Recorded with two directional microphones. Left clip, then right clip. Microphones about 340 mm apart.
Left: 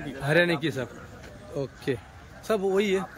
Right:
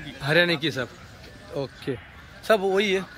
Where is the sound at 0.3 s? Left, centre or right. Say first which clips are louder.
Right 2 dB; centre.